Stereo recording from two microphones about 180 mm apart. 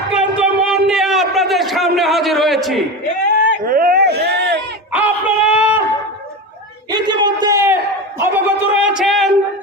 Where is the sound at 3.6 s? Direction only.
55° right (ahead or behind).